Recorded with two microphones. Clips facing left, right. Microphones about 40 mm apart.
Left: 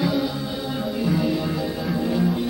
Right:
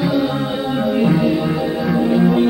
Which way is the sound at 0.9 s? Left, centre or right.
Right.